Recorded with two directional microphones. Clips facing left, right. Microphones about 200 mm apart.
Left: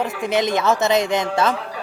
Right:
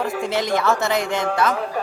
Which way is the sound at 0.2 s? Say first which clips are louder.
Left 3 dB; 20° left (ahead or behind).